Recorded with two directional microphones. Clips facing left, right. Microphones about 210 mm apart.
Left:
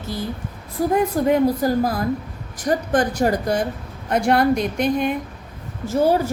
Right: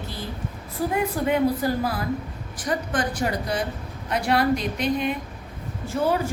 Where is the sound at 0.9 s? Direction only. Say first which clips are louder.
Left 5 dB; 45° left (ahead or behind).